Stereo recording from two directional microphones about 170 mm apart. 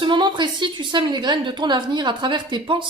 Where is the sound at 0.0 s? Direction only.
25° right (ahead or behind).